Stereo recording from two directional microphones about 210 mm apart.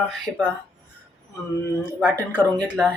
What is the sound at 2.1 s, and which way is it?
Speech, 10° left (ahead or behind).